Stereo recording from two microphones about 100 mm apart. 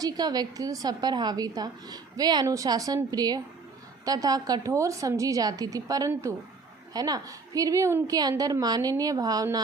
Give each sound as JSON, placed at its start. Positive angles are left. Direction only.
{"t": 0.0, "sound": "a woman's voice", "side_deg": -40}